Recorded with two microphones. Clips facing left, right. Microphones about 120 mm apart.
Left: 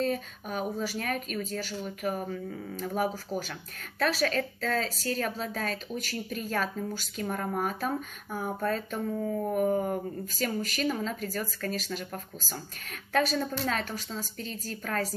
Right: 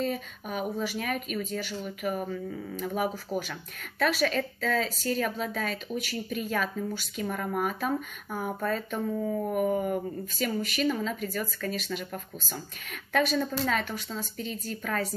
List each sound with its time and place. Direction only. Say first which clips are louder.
0.0 s a woman's voice: left 1 dB; 40° left (ahead or behind)